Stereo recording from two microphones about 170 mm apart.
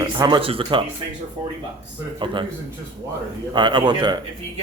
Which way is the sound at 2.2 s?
30° right (ahead or behind).